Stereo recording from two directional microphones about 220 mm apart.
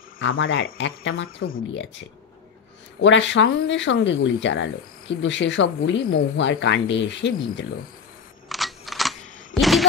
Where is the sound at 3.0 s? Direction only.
55° left (ahead or behind).